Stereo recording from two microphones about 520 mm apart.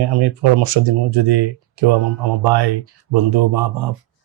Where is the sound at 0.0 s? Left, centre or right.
Right.